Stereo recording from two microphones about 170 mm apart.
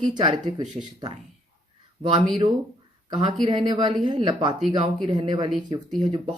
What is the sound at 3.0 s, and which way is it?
Speech, 25° right (ahead or behind).